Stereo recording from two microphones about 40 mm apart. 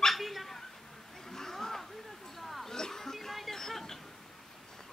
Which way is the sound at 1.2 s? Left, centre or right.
Centre.